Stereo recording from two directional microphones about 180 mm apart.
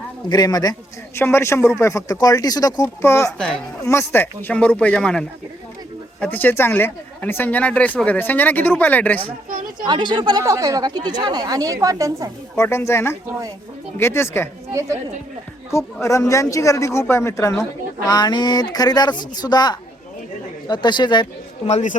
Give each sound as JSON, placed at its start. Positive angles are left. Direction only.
{"t": 0.3, "sound": "speech", "side_deg": 20}
{"t": 3.3, "sound": "speech", "side_deg": 5}
{"t": 9.8, "sound": "speech", "side_deg": -25}
{"t": 12.5, "sound": "speech", "side_deg": 15}
{"t": 14.7, "sound": "a woman's voice", "side_deg": -15}
{"t": 15.7, "sound": "speech", "side_deg": 15}
{"t": 21.7, "sound": "a man's voice", "side_deg": 40}